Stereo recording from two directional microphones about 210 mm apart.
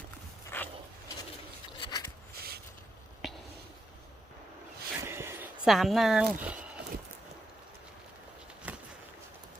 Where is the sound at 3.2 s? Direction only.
Centre (ahead or behind).